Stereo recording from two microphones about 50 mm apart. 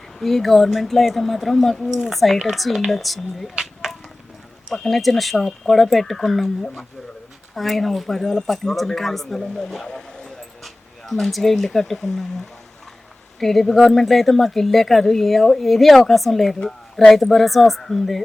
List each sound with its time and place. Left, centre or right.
0.2 s speech: centre
3.5 s a sound: centre
4.7 s speech: centre
13.4 s speech: centre
16.6 s speech: left
17.1 s speech: centre